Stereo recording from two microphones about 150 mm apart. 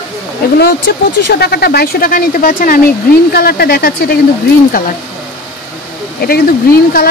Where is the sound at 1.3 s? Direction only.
90° left; by 2.8 s 70° left (ahead or behind).